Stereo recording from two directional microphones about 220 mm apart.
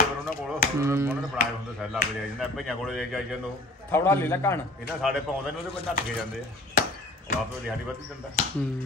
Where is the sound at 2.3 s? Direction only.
Centre (ahead or behind).